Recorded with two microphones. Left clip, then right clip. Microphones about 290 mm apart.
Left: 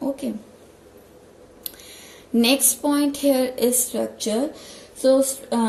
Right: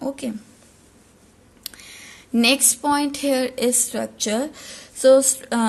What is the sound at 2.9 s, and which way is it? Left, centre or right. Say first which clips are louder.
Speech: left 1 dB; right.